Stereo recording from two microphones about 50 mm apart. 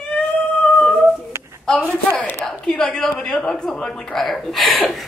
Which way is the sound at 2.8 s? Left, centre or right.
Centre.